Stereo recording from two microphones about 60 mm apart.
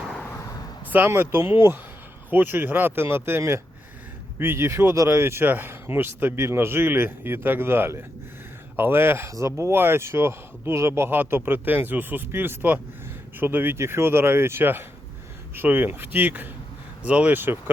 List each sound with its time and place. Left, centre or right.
0.9 s speech: right
13.7 s speech: right
17.3 s speech: right